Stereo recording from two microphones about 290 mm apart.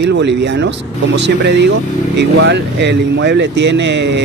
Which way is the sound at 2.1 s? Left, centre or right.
Right.